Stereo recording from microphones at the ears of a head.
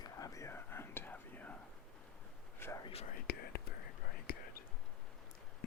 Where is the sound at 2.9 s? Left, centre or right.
Left.